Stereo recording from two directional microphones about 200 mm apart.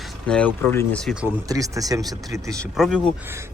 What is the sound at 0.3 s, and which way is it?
Speech, 5° left (ahead or behind).